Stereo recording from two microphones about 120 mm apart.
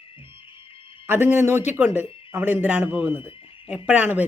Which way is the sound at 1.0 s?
20° right (ahead or behind).